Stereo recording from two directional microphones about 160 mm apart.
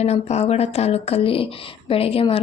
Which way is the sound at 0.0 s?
40° left (ahead or behind).